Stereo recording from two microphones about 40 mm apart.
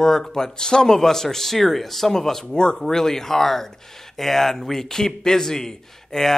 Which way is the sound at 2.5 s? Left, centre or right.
Centre.